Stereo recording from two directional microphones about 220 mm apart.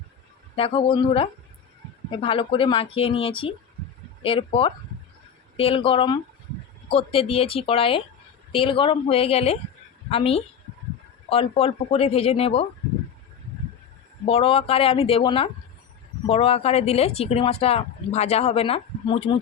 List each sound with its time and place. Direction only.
0.5 s speech: 25° left (ahead or behind)
14.3 s speech: 25° left (ahead or behind)